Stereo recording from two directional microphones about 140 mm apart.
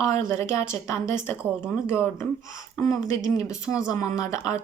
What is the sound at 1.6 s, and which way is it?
Speech, 15° left (ahead or behind).